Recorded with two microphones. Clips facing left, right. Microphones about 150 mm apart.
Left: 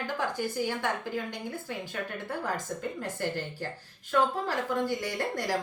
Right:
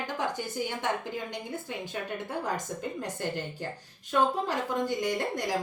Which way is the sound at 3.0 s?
15° right (ahead or behind).